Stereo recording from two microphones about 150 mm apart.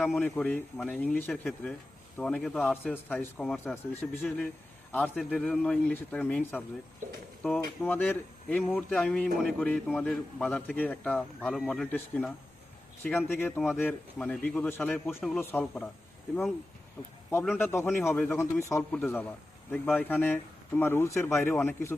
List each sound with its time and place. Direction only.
0.0 s a man's voice: 10° left (ahead or behind)
7.0 s speech: 55° right (ahead or behind)
7.4 s a man's voice: 10° left (ahead or behind)
17.4 s a man's voice: 10° left (ahead or behind)